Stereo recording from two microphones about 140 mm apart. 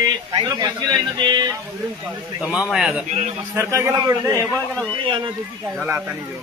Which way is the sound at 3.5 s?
20° right (ahead or behind).